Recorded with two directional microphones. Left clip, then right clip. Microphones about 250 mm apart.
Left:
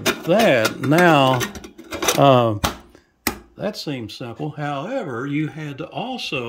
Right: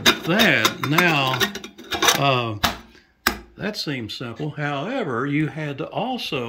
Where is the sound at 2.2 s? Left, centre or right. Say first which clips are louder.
Left 6 dB; left.